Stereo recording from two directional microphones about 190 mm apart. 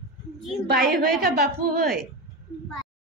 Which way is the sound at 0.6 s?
55° right (ahead or behind).